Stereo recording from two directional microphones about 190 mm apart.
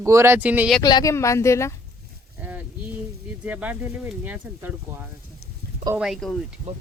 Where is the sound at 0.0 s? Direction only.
15° right (ahead or behind).